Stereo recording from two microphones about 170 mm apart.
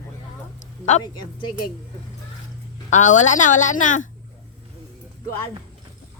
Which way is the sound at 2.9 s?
45° left (ahead or behind).